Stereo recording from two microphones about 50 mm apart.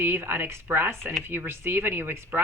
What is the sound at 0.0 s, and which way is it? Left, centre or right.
Speech, right.